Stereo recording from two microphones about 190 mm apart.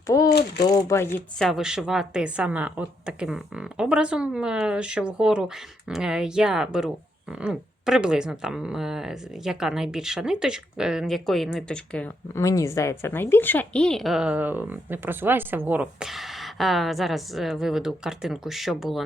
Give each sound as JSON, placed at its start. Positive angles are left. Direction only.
{"t": 0.3, "sound": "speech", "side_deg": 60}
{"t": 0.6, "sound": "speech", "side_deg": 20}
{"t": 1.4, "sound": "speech", "side_deg": 0}